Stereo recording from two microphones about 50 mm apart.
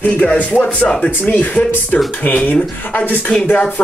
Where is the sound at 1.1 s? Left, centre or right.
Left.